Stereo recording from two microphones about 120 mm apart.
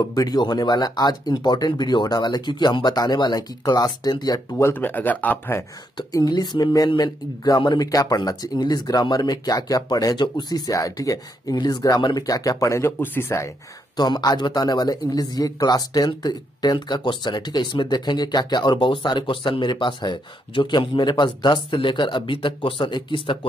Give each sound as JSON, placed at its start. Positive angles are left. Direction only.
{"t": 0.0, "sound": "a man's voice", "side_deg": 30}
{"t": 4.6, "sound": "speech", "side_deg": 15}
{"t": 5.9, "sound": "a man's voice", "side_deg": 35}
{"t": 13.9, "sound": "a man's voice", "side_deg": 35}